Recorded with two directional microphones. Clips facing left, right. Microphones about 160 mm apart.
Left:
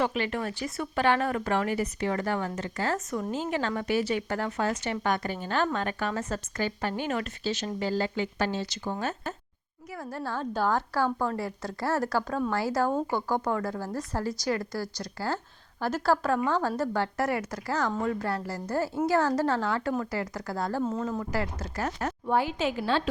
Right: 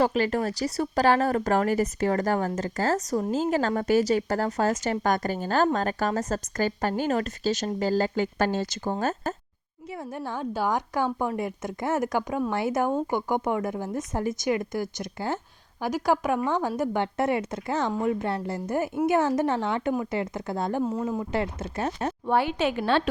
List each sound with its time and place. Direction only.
0.0 s a woman's voice: 40° right (ahead or behind)
9.9 s a woman's voice: 20° right (ahead or behind)
22.3 s a woman's voice: 65° right (ahead or behind)